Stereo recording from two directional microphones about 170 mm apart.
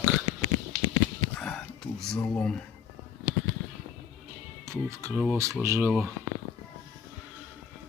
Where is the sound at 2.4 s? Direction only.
5° left (ahead or behind).